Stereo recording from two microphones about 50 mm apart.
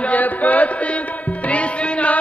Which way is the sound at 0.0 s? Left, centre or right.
Left.